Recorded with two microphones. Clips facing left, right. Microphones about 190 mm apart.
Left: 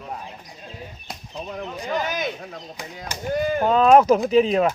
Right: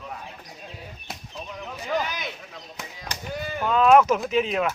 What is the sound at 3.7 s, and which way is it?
A man's voice, 35° left (ahead or behind).